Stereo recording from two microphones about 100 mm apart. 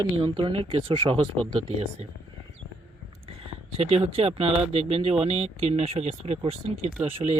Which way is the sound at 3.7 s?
80° right.